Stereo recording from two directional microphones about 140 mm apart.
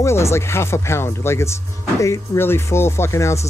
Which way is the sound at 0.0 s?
20° left (ahead or behind).